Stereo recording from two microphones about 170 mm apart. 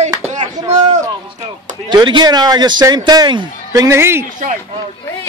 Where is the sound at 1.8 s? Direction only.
25° right (ahead or behind).